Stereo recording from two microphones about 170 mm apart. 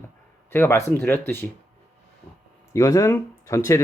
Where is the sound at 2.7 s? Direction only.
15° left (ahead or behind).